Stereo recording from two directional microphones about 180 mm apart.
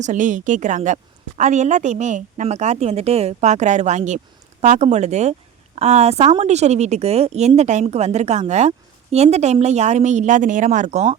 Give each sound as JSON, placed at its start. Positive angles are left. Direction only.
{"t": 0.0, "sound": "a woman's voice", "side_deg": -45}